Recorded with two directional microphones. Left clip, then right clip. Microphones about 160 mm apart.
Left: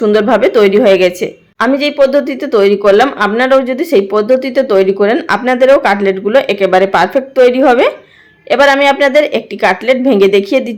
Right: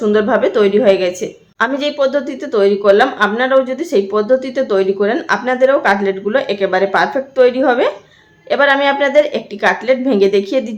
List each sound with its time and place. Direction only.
0.0 s a woman's voice: 35° left (ahead or behind)